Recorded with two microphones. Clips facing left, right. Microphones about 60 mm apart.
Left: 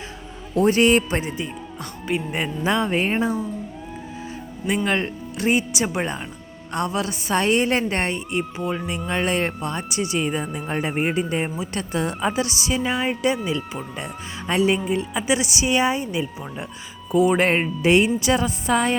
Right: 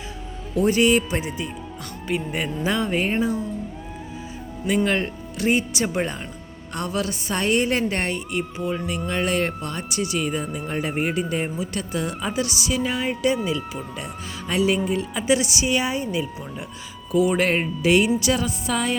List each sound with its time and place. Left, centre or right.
0.5 s speech: left
2.0 s speech: left
4.9 s speech: left
6.7 s speech: left
14.0 s speech: left
14.8 s speech: left